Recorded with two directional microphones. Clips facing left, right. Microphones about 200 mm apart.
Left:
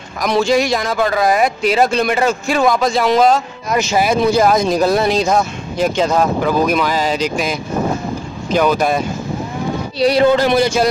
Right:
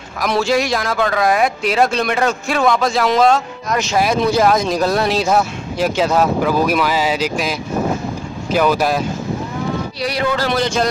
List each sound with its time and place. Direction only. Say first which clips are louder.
0.2 s speech: left 2 dB; centre (ahead or behind)
9.9 s speech: left 10 dB; 25° left (ahead or behind); by 10.9 s 10° left (ahead or behind)